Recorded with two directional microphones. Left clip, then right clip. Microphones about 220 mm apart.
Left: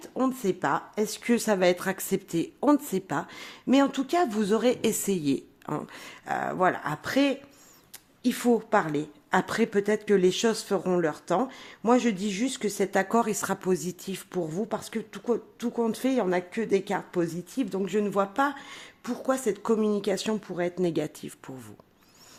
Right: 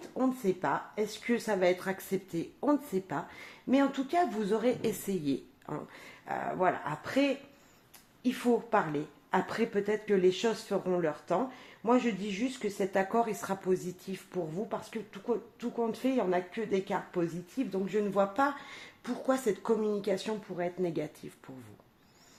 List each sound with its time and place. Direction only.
0.2 s a woman's voice: 40° left (ahead or behind)